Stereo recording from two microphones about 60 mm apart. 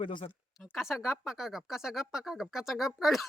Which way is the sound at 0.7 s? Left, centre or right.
Centre.